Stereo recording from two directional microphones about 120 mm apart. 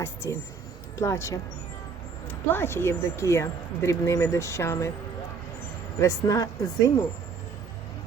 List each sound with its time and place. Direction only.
0.0 s speech: 25° left (ahead or behind)
6.0 s speech: 25° left (ahead or behind)